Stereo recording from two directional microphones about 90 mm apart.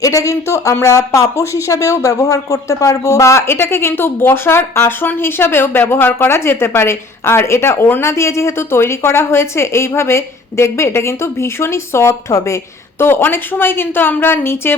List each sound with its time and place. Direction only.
0.0 s speech: 40° left (ahead or behind)